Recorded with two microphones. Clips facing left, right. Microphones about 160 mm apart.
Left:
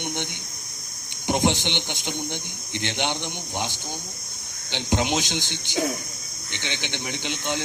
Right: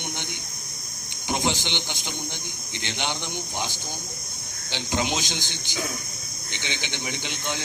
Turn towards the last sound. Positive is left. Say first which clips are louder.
# left 3 dB
turn(degrees=60)  # may be behind; listen again after turning